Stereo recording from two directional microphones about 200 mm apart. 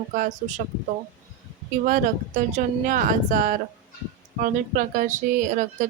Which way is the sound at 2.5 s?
40° right (ahead or behind).